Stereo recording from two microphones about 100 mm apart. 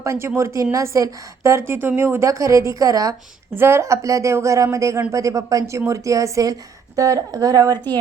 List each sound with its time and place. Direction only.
0.0 s a woman's voice: 25° right (ahead or behind)
3.5 s speech: 25° right (ahead or behind)